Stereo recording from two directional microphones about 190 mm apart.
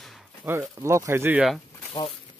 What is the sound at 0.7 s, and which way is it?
Speech, 15° right (ahead or behind).